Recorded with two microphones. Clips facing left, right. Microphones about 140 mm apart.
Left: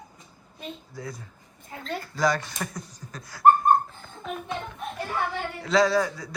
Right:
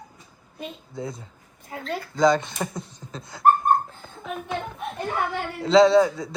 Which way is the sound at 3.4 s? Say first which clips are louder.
Left 1 dB; centre (ahead or behind).